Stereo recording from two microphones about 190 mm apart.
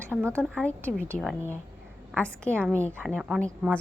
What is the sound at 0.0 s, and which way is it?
Speech, 10° right (ahead or behind).